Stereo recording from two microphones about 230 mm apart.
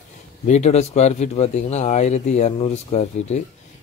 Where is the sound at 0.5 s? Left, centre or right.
Left.